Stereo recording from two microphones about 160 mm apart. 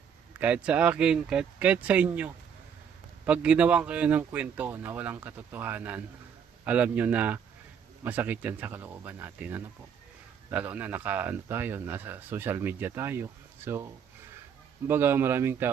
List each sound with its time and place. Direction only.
0.3 s speech: 10° right (ahead or behind)